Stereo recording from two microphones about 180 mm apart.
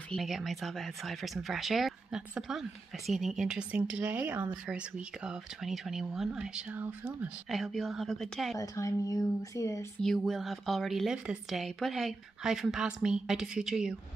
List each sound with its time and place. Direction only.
0.1 s speech: centre (ahead or behind)
8.5 s speech: 20° left (ahead or behind)
10.0 s speech: centre (ahead or behind)